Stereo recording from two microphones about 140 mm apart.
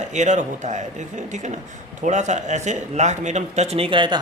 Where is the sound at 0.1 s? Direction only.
60° right (ahead or behind).